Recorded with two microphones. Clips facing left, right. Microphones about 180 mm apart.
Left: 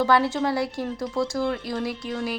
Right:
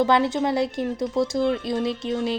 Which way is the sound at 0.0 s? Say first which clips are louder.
Right 1 dB; 20° right (ahead or behind).